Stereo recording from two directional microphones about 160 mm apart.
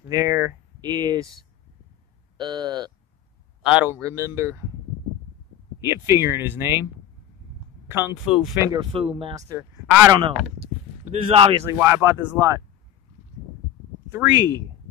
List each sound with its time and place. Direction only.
0.1 s speech: 20° right (ahead or behind)
2.3 s speech: 25° right (ahead or behind)
3.6 s speech: 10° right (ahead or behind)
5.8 s speech: 20° right (ahead or behind)
7.9 s speech: 10° right (ahead or behind)
8.6 s speech: 30° right (ahead or behind)
9.5 s speech: 10° right (ahead or behind)
11.1 s speech: 35° right (ahead or behind)
11.6 s speech: 15° right (ahead or behind)